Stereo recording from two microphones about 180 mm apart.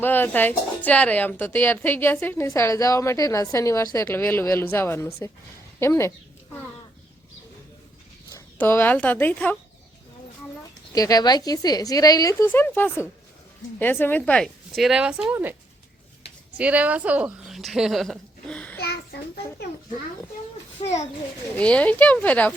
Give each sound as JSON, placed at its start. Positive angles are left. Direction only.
{"t": 0.0, "sound": "a woman's voice", "side_deg": 10}
{"t": 8.3, "sound": "speech", "side_deg": 10}
{"t": 10.9, "sound": "speech", "side_deg": 20}
{"t": 16.6, "sound": "speech", "side_deg": -10}
{"t": 18.8, "sound": "a child's voice", "side_deg": 65}
{"t": 20.8, "sound": "a child's voice", "side_deg": 40}
{"t": 21.6, "sound": "a woman's voice", "side_deg": 5}